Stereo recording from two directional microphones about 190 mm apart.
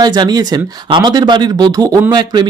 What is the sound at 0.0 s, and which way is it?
Speech, 20° right (ahead or behind).